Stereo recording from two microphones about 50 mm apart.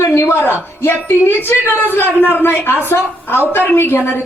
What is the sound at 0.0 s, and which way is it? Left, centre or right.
A woman's voice, left.